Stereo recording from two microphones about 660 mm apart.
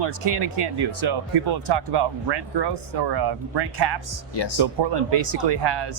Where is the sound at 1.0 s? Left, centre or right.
Right.